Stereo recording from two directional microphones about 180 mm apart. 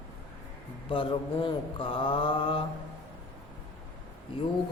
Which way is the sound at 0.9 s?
30° left (ahead or behind).